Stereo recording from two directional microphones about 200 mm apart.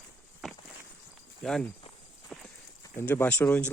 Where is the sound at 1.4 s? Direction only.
Centre (ahead or behind).